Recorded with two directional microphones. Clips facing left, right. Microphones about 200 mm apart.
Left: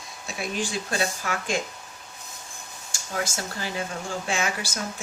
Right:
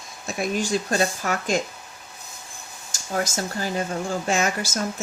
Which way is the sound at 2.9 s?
40° right (ahead or behind).